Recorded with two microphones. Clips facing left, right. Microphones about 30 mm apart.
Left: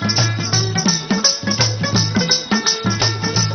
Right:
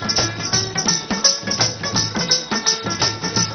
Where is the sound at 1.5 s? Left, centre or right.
Centre.